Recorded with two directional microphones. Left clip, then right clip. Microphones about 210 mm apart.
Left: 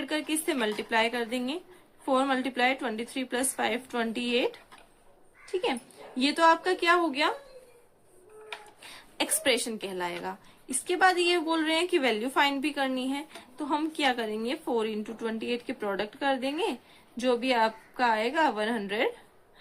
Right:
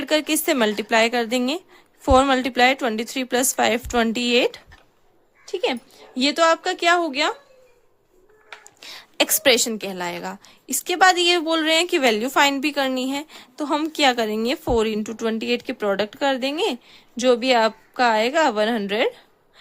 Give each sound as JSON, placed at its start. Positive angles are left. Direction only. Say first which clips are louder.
{"t": 0.0, "sound": "a woman's voice", "louder": "right 10 dB", "side_deg": -60}
{"t": 8.9, "sound": "a woman's voice", "louder": "right 10 dB", "side_deg": -55}